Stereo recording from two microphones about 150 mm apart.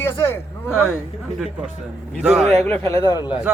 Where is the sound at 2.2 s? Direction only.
5° right (ahead or behind).